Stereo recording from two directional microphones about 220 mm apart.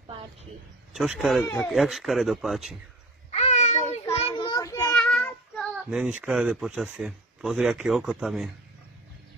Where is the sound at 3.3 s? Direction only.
30° left (ahead or behind).